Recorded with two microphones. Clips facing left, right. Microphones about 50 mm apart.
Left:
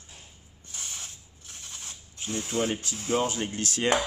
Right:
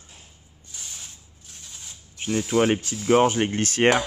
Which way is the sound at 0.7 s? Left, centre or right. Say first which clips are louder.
Left 1 dB; left.